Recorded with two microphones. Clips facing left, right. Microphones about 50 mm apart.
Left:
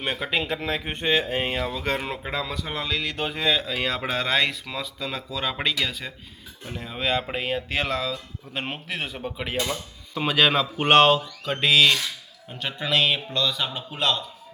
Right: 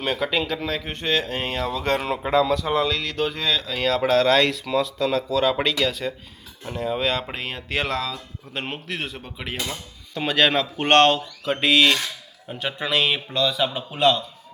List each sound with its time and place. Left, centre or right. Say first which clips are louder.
0.0 s speech: right 3 dB; centre
0.4 s speech: right 1 dB; left; by 14.2 s centre